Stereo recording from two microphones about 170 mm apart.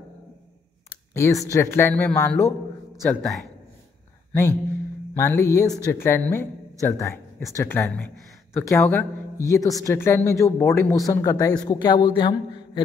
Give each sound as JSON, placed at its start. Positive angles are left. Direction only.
{"t": 1.1, "sound": "speech", "side_deg": 15}
{"t": 3.1, "sound": "a man's voice", "side_deg": 0}
{"t": 4.3, "sound": "a man's voice", "side_deg": 15}